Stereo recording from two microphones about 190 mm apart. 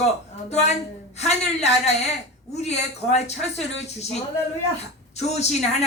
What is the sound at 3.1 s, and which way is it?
A woman's voice, 35° left (ahead or behind).